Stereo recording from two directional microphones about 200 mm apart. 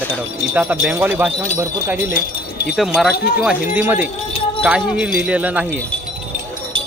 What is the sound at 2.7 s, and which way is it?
Wind chime, centre (ahead or behind).